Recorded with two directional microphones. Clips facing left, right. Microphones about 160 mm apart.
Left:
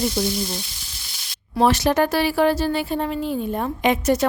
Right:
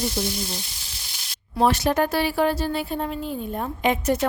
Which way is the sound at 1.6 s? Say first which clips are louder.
Left 2 dB; 90° left.